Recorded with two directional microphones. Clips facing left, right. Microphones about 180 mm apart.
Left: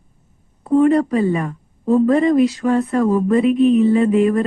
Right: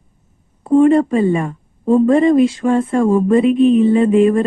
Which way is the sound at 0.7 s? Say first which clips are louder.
Right 3 dB; 25° right (ahead or behind).